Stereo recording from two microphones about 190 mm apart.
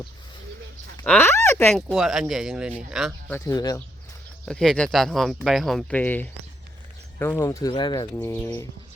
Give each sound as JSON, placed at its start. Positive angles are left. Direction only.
{"t": 1.0, "sound": "speech", "side_deg": 10}
{"t": 1.9, "sound": "speech", "side_deg": 0}
{"t": 3.2, "sound": "speech", "side_deg": 15}
{"t": 4.4, "sound": "speech", "side_deg": 5}